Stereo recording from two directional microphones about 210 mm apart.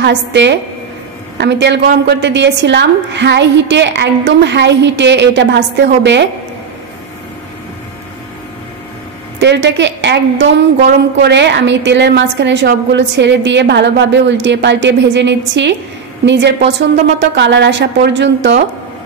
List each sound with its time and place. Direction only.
0.0 s a woman's voice: 55° right (ahead or behind)
9.4 s a woman's voice: 55° right (ahead or behind)